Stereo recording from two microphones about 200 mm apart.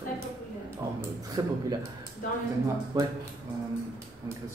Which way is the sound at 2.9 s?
25° right (ahead or behind).